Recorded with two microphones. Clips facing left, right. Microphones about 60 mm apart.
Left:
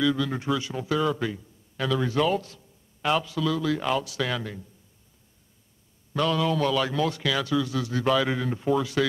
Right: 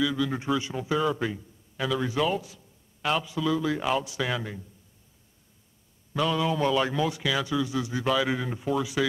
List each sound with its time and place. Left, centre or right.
0.0 s speech: centre
0.4 s a man's voice: right; by 3.3 s centre
3.3 s speech: centre
6.1 s speech: centre
8.0 s speech: centre